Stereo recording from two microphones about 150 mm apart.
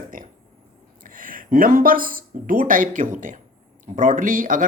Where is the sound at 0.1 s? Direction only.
65° right (ahead or behind).